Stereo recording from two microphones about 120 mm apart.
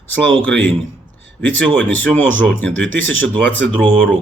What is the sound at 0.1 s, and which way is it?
Speech, 15° left (ahead or behind).